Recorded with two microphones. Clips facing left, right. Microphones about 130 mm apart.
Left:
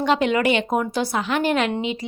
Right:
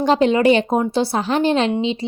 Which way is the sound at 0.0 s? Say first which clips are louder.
Right 5 dB; 35° right (ahead or behind).